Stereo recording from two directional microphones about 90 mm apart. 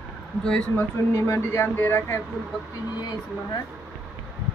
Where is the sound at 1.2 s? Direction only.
30° left (ahead or behind).